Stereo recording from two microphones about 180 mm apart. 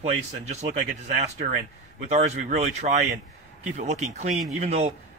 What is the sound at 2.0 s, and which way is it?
A man's voice, 40° right (ahead or behind).